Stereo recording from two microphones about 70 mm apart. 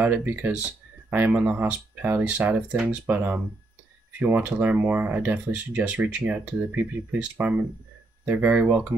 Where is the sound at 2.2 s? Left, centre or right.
Centre.